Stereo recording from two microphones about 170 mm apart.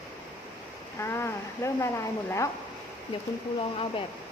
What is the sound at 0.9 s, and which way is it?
Speech, 15° left (ahead or behind).